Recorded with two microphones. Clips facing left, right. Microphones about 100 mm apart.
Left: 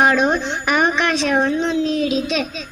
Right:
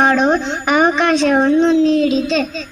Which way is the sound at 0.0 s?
5° left (ahead or behind).